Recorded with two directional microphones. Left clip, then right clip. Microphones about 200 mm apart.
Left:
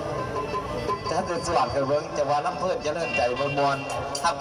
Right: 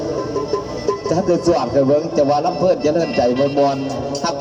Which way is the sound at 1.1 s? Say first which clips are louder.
Right 10 dB; 35° right (ahead or behind).